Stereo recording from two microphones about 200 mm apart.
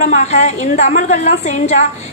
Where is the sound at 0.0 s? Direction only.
35° left (ahead or behind).